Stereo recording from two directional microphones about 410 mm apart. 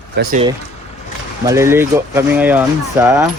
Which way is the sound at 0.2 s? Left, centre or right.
Right.